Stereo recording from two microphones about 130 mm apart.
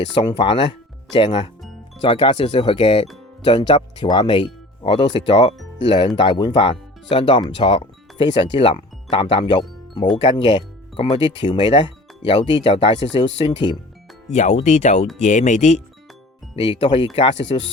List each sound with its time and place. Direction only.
0.0 s speech: 40° left (ahead or behind)
14.3 s speech: 60° left (ahead or behind)
16.6 s speech: 45° left (ahead or behind)